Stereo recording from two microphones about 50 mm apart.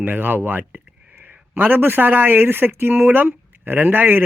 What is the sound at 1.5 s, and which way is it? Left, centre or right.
Speech, right.